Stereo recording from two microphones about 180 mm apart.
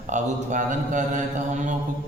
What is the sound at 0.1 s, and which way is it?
A man's voice, 45° right (ahead or behind).